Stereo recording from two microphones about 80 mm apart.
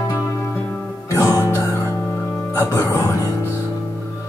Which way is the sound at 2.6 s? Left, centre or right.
Left.